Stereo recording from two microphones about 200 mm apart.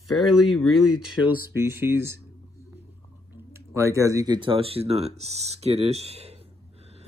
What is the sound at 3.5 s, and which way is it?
Speech, 15° right (ahead or behind).